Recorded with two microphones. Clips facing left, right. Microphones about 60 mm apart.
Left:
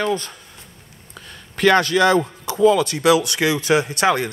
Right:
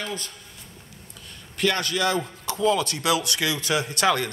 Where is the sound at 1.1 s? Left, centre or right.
Left.